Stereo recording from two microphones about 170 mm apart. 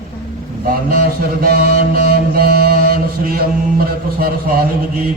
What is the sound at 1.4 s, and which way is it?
Mantra, 65° right (ahead or behind).